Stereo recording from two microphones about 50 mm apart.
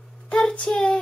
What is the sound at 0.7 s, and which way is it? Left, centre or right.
Speech, centre.